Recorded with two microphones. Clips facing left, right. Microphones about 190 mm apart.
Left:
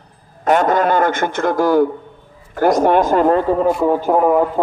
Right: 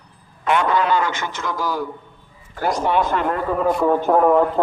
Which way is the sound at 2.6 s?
45° left (ahead or behind).